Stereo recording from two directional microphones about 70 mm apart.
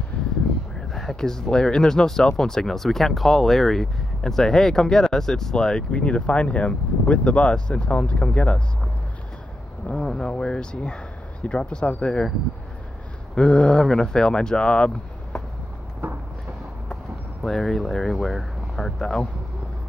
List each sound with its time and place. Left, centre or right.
0.1 s a sound: centre
0.9 s speech: centre
9.8 s speech: centre
13.3 s speech: centre
16.0 s a sound: right
16.9 s speech: centre